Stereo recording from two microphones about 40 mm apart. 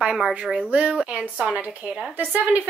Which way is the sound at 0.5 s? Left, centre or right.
Right.